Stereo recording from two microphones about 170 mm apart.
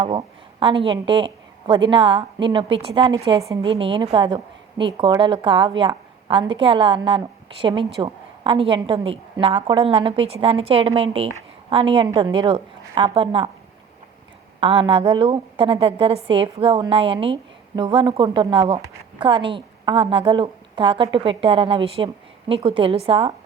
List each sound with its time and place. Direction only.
0.0 s a woman's voice: 30° right (ahead or behind)
14.6 s a woman's voice: 30° right (ahead or behind)